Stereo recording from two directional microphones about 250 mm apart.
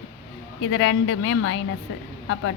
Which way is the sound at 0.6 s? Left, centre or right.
Left.